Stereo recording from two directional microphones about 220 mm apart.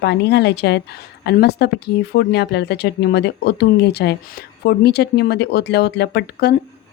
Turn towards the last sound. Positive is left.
turn(degrees=50)  # may be behind; listen again after turning